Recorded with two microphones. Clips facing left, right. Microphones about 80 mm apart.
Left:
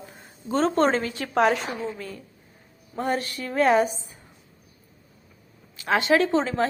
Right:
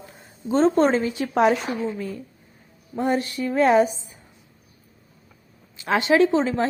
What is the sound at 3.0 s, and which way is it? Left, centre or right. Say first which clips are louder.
Speech: right 4 dB; centre.